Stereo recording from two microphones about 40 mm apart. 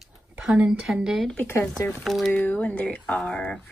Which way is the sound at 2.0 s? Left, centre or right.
Centre.